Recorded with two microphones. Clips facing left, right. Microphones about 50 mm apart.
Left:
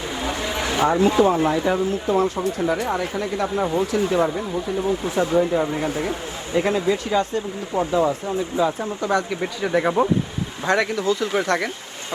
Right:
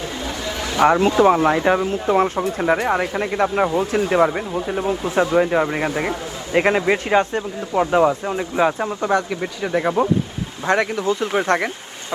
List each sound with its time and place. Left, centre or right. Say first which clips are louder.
0.8 s speech: right 3 dB; right
1.9 s speech: right 2 dB; right
9.0 s speech: right 1 dB; right
9.4 s speech: even; centre
10.6 s speech: right 2 dB; right